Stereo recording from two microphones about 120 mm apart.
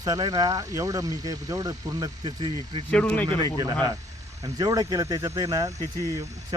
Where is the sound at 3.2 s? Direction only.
40° right (ahead or behind).